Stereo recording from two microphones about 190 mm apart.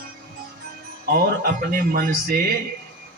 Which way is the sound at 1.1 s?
50° right (ahead or behind).